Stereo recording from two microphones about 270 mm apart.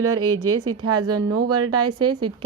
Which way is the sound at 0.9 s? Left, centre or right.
Centre.